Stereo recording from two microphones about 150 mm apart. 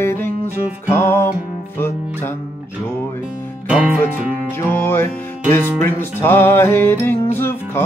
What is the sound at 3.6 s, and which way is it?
Music, 10° right (ahead or behind).